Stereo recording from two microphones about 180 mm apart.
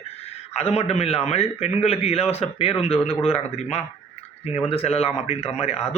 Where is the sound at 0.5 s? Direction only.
35° left (ahead or behind).